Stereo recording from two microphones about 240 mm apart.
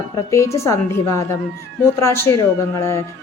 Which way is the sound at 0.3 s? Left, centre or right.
Centre.